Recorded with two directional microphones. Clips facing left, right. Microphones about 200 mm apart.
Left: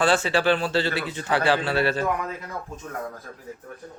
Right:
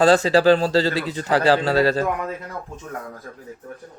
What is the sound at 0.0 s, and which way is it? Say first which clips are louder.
A man's voice: right 6 dB; 35° right (ahead or behind).